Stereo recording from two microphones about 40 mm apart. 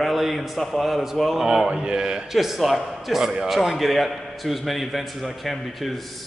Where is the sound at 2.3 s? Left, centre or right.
Centre.